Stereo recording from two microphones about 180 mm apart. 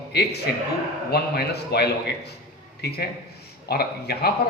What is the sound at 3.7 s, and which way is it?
Speech, 60° left (ahead or behind).